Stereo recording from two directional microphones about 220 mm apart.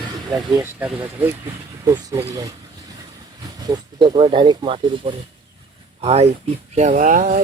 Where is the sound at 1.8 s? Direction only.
15° right (ahead or behind).